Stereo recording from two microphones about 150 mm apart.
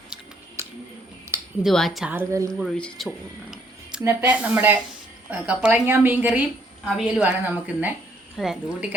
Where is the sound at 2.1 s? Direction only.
15° right (ahead or behind).